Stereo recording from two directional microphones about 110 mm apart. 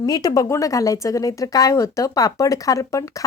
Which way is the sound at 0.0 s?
35° left (ahead or behind).